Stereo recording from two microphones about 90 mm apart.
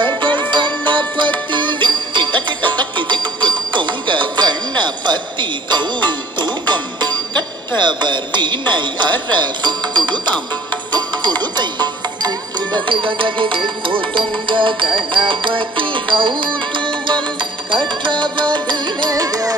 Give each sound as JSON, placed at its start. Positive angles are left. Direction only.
{"t": 0.0, "sound": "music", "side_deg": -60}
{"t": 18.7, "sound": "carnatic music", "side_deg": -55}